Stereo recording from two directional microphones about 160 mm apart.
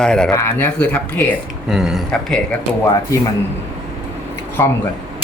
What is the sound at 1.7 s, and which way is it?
Speech, centre (ahead or behind).